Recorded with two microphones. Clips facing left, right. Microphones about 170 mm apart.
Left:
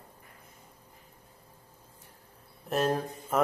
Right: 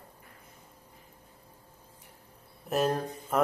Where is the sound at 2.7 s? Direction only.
Centre (ahead or behind).